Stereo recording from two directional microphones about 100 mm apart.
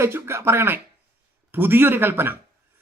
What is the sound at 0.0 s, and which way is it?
A man's voice, 25° right (ahead or behind).